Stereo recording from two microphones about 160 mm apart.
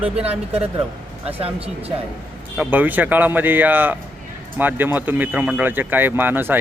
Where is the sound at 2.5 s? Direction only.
10° right (ahead or behind).